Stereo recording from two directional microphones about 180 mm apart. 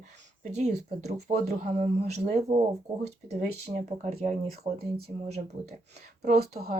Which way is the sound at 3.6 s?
45° right (ahead or behind).